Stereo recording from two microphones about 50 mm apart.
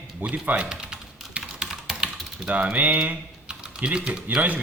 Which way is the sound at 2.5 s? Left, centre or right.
Right.